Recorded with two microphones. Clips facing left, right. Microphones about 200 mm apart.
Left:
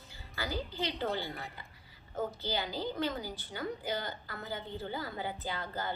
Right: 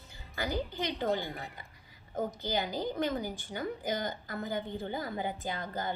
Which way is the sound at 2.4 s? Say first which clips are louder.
Right 3 dB; 15° right (ahead or behind).